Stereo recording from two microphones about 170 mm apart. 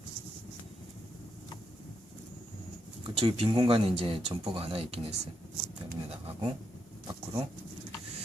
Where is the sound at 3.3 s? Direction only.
35° right (ahead or behind).